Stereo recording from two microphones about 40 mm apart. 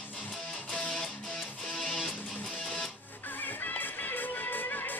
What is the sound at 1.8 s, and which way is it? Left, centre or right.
Music, centre.